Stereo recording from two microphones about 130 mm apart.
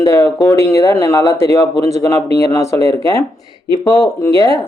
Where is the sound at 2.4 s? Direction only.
25° left (ahead or behind).